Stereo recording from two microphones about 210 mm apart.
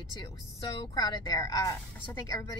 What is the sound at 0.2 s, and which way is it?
A woman's voice, 20° left (ahead or behind).